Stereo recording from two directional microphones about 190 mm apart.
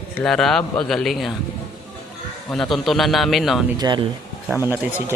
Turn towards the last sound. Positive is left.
turn(degrees=-10)  # may be behind; listen again after turning